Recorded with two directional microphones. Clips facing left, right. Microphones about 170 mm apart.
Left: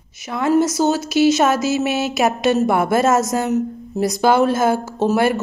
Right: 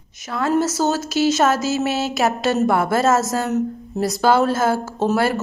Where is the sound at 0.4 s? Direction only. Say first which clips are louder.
Left 3 dB; 15° left (ahead or behind).